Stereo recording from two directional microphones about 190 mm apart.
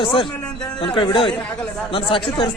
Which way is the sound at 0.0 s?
25° left (ahead or behind).